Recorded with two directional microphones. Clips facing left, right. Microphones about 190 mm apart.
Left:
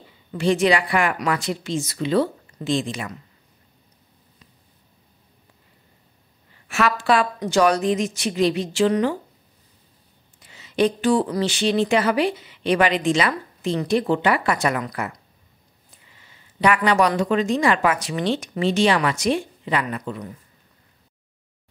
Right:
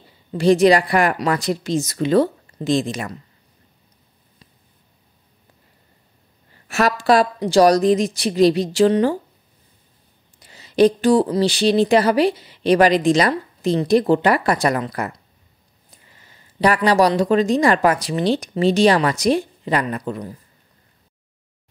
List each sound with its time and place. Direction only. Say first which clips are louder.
0.4 s speech: right 5 dB; 40° right (ahead or behind)
6.7 s speech: right 3 dB; 40° right (ahead or behind)
10.4 s a sound: right 6 dB; 35° right (ahead or behind)
11.2 s speech: right 5 dB; 35° right (ahead or behind)
16.1 s a sound: right 2 dB; 45° right (ahead or behind)
16.5 s speech: right 3 dB; 35° right (ahead or behind)